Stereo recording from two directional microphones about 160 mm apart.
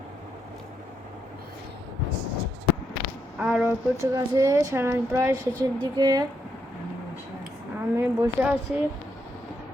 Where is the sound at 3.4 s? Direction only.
5° right (ahead or behind).